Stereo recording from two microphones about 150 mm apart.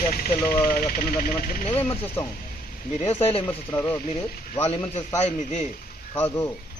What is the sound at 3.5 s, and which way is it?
Speech, 10° left (ahead or behind).